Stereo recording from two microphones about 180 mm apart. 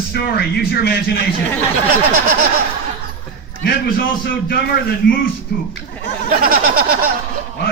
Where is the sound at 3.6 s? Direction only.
60° left (ahead or behind).